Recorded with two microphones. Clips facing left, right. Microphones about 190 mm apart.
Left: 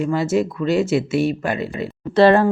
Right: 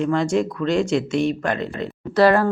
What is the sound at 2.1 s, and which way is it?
Speech, 25° left (ahead or behind).